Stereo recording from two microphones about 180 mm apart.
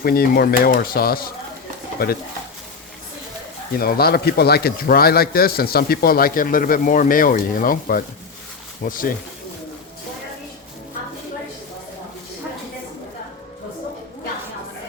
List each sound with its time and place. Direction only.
0.0 s speech: 55° left (ahead or behind)
3.8 s speech: 55° left (ahead or behind)